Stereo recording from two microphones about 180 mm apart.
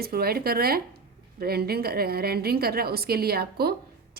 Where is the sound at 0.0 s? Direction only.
60° right (ahead or behind).